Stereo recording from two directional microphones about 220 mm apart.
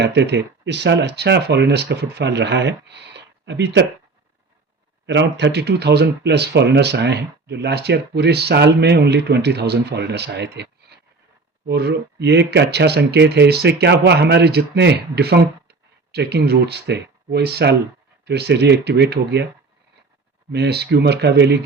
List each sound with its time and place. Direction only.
0.0 s speech: 50° right (ahead or behind)
5.0 s speech: 50° right (ahead or behind)
20.5 s speech: 50° right (ahead or behind)